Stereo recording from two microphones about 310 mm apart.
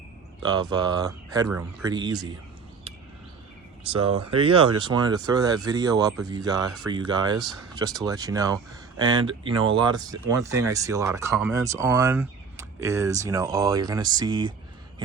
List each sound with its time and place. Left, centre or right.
0.4 s speech: centre
3.9 s speech: centre